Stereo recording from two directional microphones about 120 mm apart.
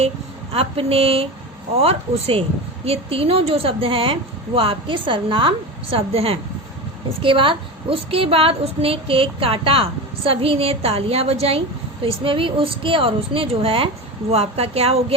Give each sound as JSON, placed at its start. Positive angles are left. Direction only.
{"t": 0.5, "sound": "a woman's voice", "side_deg": -55}